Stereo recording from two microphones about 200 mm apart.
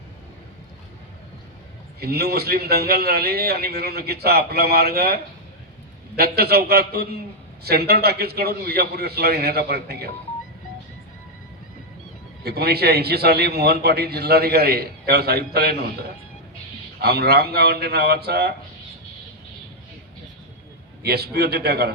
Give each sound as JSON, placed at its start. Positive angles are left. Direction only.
{"t": 2.0, "sound": "a man's voice", "side_deg": -50}
{"t": 12.4, "sound": "a man's voice", "side_deg": -50}
{"t": 17.0, "sound": "a man's voice", "side_deg": -50}
{"t": 21.0, "sound": "a man's voice", "side_deg": -50}